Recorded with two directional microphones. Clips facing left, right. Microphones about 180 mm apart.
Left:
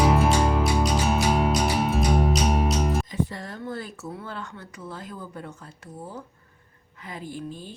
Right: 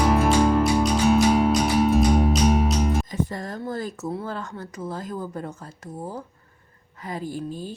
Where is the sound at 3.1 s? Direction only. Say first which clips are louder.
Right 2 dB; 45° right (ahead or behind).